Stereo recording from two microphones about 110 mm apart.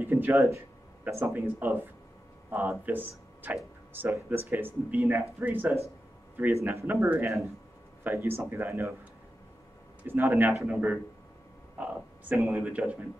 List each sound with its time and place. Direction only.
0.0 s speech: 20° right (ahead or behind)
10.0 s speech: 20° right (ahead or behind)
12.4 s speech: 25° right (ahead or behind)
12.6 s speech: 10° right (ahead or behind)